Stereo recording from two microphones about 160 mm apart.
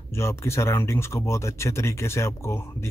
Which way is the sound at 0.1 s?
15° left (ahead or behind).